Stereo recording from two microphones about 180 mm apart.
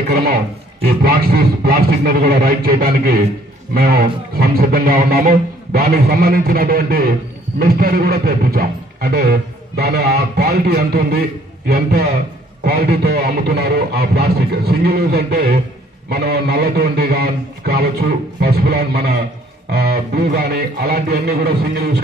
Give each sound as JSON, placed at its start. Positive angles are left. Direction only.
{"t": 0.1, "sound": "speech", "side_deg": -60}